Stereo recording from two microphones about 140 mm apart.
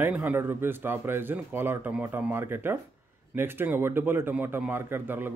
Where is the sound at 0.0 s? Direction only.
10° right (ahead or behind).